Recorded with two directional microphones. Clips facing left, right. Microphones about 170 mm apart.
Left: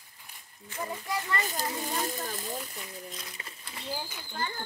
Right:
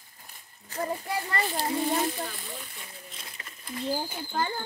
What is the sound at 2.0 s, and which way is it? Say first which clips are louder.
Speech: right 1 dB; 40° left (ahead or behind).